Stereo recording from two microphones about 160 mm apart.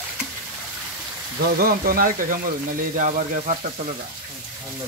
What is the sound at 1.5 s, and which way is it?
Speech, 70° right (ahead or behind).